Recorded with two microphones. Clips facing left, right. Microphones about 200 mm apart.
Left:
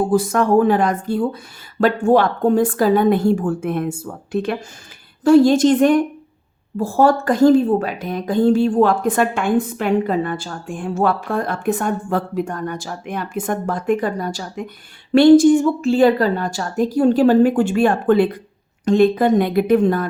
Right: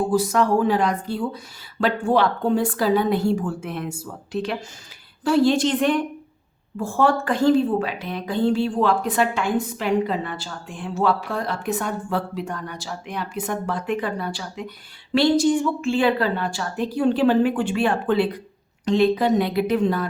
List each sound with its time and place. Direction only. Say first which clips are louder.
0.1 s a woman's voice: left 4 dB; 50° left (ahead or behind)